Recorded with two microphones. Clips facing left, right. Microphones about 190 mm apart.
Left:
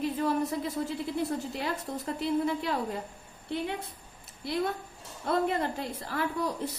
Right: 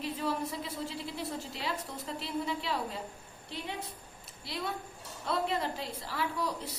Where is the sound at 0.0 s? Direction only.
50° left (ahead or behind).